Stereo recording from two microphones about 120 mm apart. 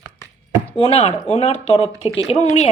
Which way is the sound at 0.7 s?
55° left (ahead or behind).